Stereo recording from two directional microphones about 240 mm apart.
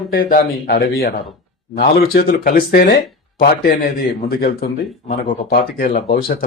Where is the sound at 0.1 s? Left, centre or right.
Left.